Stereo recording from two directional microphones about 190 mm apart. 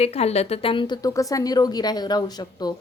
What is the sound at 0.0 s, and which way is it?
A woman's voice, 35° left (ahead or behind).